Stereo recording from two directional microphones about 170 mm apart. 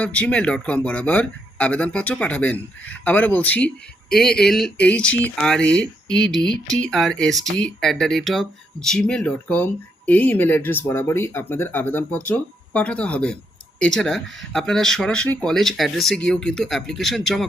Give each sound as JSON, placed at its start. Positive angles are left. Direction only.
{"t": 0.0, "sound": "speech", "side_deg": 5}